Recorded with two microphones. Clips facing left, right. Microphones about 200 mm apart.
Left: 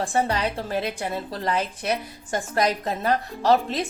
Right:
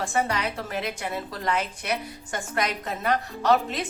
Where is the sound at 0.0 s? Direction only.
30° left (ahead or behind).